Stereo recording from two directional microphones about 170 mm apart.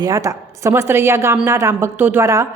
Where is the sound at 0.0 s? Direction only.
20° right (ahead or behind).